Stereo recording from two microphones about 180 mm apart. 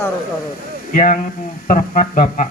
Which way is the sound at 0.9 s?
45° left (ahead or behind).